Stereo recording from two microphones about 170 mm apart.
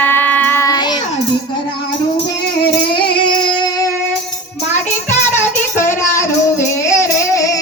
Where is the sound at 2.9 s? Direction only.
30° left (ahead or behind).